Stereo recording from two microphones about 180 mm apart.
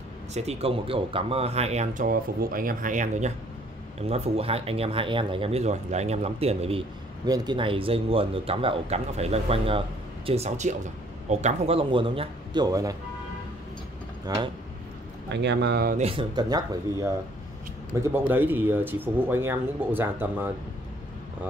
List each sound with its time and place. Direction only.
0.3 s speech: 35° right (ahead or behind)
2.0 s speech: 50° right (ahead or behind); by 6.8 s 35° right (ahead or behind)
7.2 s a man's voice: 20° right (ahead or behind)
14.2 s a man's voice: 20° right (ahead or behind)
15.2 s speech: 75° right (ahead or behind)
16.0 s a man's voice: 30° right (ahead or behind); by 20.5 s 10° right (ahead or behind)